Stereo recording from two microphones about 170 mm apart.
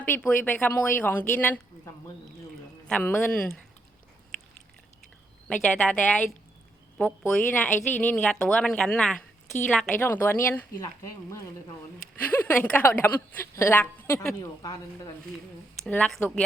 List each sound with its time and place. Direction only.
0.1 s a woman's voice: 10° left (ahead or behind)
5.5 s a woman's voice: 5° left (ahead or behind)
7.5 s a woman's voice: 10° left (ahead or behind)
12.2 s a woman's voice: 10° left (ahead or behind)
15.9 s a woman's voice: 5° left (ahead or behind)